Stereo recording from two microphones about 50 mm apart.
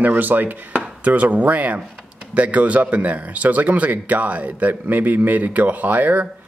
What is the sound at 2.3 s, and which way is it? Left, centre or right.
Speech, right.